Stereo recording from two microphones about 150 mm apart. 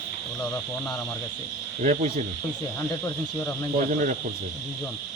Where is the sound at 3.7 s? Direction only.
65° right (ahead or behind).